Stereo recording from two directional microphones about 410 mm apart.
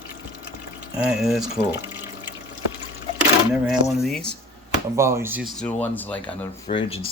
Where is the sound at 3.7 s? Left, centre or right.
Centre.